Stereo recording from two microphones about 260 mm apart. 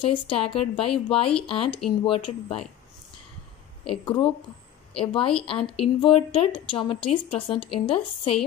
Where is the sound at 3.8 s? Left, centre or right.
Centre.